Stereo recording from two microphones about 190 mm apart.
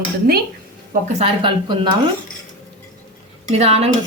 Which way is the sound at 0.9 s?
35° right (ahead or behind).